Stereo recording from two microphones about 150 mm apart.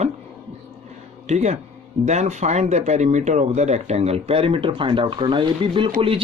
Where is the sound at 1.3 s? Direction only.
50° right (ahead or behind).